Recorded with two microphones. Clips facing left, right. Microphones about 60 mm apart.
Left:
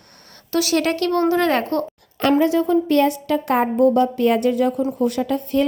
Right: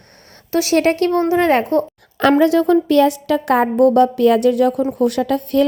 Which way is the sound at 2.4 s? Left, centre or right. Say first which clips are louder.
Right 4 dB; right.